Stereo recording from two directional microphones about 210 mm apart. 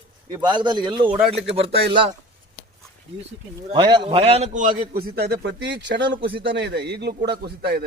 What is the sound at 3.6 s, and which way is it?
A man's voice, 25° right (ahead or behind).